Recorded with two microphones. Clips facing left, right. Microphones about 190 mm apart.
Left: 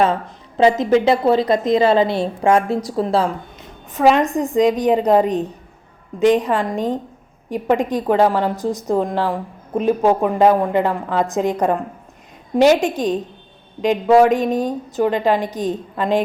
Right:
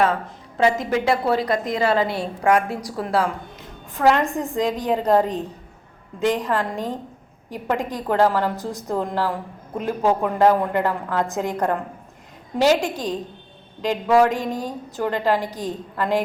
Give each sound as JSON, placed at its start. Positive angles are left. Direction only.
{"t": 0.0, "sound": "a woman's voice", "side_deg": 25}
{"t": 12.5, "sound": "a woman's voice", "side_deg": 20}